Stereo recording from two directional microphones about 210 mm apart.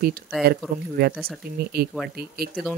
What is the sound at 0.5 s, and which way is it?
Speech, 50° right (ahead or behind).